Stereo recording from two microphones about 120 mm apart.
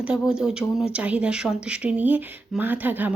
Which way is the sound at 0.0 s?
5° right (ahead or behind).